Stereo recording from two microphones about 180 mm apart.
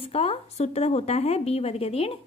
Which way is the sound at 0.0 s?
35° left (ahead or behind).